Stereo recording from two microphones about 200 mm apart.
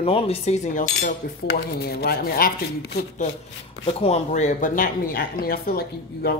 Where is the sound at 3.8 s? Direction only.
30° left (ahead or behind).